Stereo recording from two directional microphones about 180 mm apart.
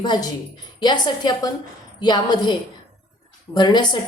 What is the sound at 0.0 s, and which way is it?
A woman's voice, 25° left (ahead or behind).